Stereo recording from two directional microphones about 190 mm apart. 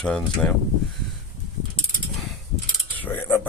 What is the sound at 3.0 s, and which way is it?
Cutlery, 10° left (ahead or behind).